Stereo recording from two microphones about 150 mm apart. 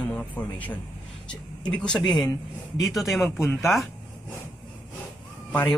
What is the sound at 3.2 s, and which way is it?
Speech, 15° left (ahead or behind).